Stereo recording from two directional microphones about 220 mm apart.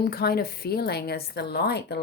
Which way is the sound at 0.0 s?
45° left (ahead or behind).